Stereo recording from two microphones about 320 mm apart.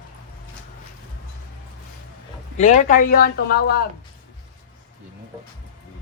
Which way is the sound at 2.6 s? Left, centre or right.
Left.